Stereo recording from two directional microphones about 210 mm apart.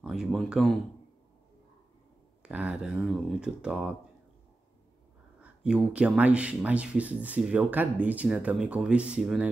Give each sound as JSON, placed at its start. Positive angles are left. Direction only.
{"t": 0.0, "sound": "speech", "side_deg": 0}
{"t": 2.4, "sound": "speech", "side_deg": -5}
{"t": 5.4, "sound": "speech", "side_deg": -5}